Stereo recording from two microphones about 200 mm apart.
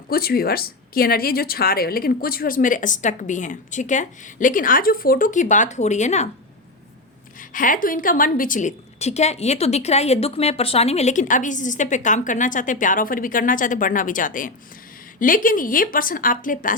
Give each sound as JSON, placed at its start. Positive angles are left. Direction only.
{"t": 0.1, "sound": "a woman's voice", "side_deg": 50}
{"t": 7.3, "sound": "a woman's voice", "side_deg": 40}